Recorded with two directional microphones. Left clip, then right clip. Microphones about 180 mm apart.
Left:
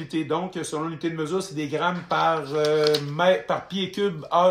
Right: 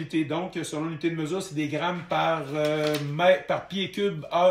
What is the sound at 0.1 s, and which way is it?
Speech, 15° left (ahead or behind).